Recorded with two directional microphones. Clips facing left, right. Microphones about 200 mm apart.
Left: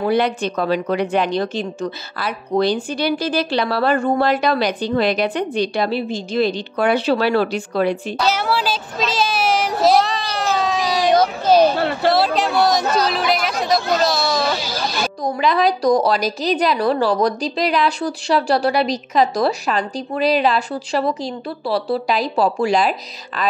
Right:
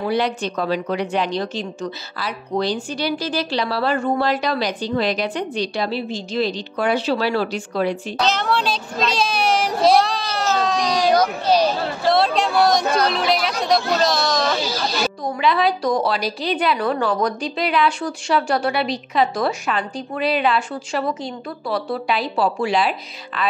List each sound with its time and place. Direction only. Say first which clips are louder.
0.0 s a woman's voice: left 3 dB; 55° left (ahead or behind)
8.2 s child singing: right 1 dB; 10° left (ahead or behind)
11.4 s a sound: left 4 dB; 55° left (ahead or behind)
12.1 s a sound: right 1 dB; 5° left (ahead or behind)
13.1 s chatter: left 1 dB; centre (ahead or behind)
15.2 s a woman's voice: left 3 dB; 40° left (ahead or behind)